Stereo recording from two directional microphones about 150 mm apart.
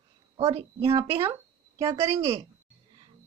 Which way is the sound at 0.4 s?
45° right (ahead or behind).